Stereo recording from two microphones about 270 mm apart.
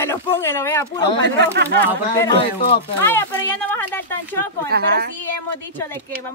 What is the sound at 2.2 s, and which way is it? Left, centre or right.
Speech, centre.